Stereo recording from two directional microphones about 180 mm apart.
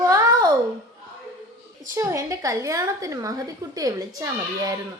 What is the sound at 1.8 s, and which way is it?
A woman's voice, 15° right (ahead or behind).